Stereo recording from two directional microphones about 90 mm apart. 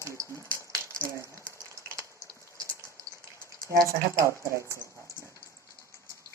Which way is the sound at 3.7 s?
35° right (ahead or behind).